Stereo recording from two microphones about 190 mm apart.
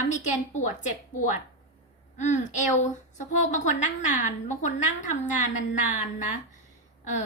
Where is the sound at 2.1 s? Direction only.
40° left (ahead or behind).